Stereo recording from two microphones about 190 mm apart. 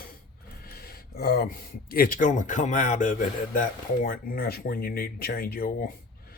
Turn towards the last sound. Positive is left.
turn(degrees=50)  # may be behind; listen again after turning